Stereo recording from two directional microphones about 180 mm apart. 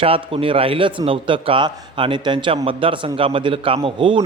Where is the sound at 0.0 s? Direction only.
30° right (ahead or behind).